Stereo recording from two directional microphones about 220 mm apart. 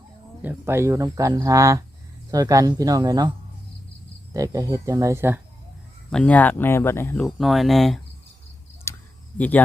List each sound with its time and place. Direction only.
0.4 s speech: 10° right (ahead or behind)
4.4 s speech: 15° right (ahead or behind)
6.1 s speech: 5° left (ahead or behind)
8.9 s a sound: 10° left (ahead or behind)
9.4 s speech: 5° left (ahead or behind)